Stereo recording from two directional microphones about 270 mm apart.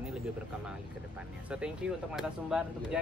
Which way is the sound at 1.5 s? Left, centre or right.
Centre.